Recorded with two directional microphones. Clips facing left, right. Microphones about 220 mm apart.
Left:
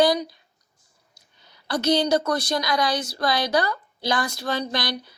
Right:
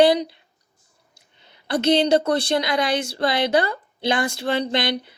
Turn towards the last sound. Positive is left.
turn(degrees=-25)  # may be behind; listen again after turning